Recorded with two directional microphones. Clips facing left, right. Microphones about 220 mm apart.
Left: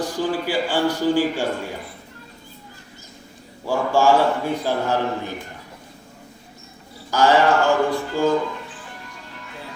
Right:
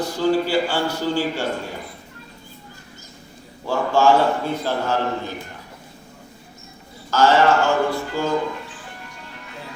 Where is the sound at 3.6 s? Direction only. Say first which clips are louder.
Even; 15° left (ahead or behind).